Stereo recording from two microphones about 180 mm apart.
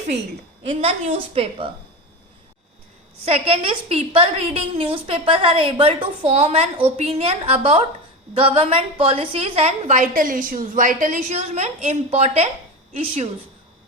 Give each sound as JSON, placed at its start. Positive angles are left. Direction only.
{"t": 0.7, "sound": "a woman's voice", "side_deg": -35}
{"t": 3.2, "sound": "a woman's voice", "side_deg": -35}